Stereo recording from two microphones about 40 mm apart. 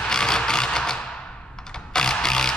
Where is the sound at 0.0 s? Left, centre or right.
Centre.